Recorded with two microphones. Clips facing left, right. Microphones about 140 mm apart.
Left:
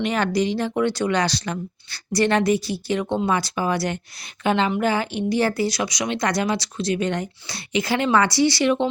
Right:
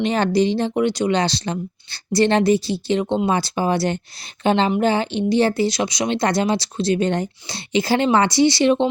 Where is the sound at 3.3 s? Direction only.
30° right (ahead or behind).